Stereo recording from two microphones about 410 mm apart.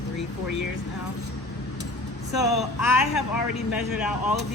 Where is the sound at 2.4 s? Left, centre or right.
Centre.